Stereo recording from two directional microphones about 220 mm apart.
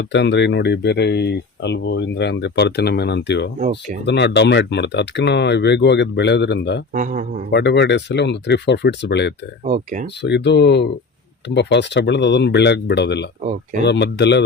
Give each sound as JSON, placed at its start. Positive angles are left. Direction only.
{"t": 0.0, "sound": "speech", "side_deg": 50}
{"t": 3.6, "sound": "a man's voice", "side_deg": -35}
{"t": 4.0, "sound": "speech", "side_deg": 50}
{"t": 6.9, "sound": "a man's voice", "side_deg": -35}
{"t": 7.5, "sound": "speech", "side_deg": 50}
{"t": 9.6, "sound": "a man's voice", "side_deg": -35}
{"t": 10.2, "sound": "speech", "side_deg": 50}